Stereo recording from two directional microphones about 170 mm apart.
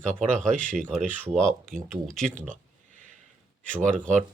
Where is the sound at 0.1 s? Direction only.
45° right (ahead or behind).